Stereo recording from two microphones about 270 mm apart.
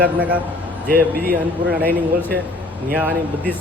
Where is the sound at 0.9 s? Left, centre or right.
Right.